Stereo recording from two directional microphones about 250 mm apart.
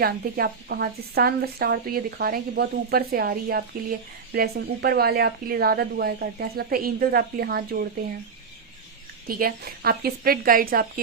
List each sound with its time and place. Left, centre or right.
0.0 s a woman's voice: right
9.2 s a woman's voice: right